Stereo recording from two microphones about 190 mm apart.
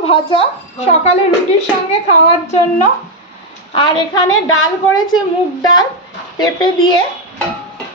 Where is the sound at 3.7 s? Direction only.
25° left (ahead or behind).